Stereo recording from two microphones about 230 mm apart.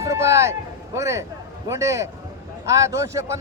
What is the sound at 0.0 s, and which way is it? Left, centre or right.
A man's voice, centre.